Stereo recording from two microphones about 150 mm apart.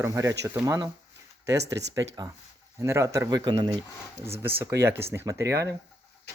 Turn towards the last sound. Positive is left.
turn(degrees=-20)  # may be behind; listen again after turning